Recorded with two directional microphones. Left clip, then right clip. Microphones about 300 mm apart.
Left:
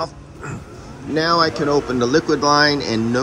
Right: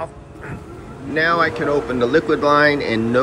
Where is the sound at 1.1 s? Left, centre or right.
Centre.